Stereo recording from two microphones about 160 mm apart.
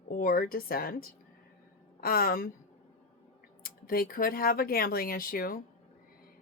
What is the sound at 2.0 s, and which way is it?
Speech, 65° left (ahead or behind).